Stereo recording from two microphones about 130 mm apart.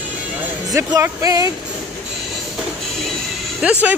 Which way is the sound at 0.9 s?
25° right (ahead or behind).